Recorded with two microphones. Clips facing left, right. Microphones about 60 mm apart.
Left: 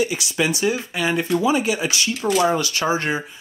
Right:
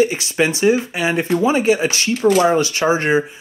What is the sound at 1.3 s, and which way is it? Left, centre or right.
Speech, right.